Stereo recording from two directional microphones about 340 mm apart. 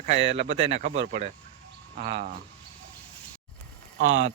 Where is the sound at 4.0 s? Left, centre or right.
Right.